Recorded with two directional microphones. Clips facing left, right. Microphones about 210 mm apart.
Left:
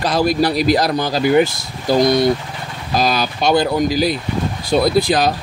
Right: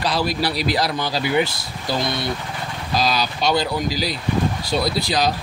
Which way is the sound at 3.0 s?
50° left (ahead or behind).